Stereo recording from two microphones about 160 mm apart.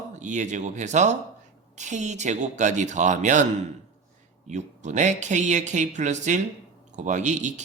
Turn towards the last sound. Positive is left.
turn(degrees=-50)  # may be behind; listen again after turning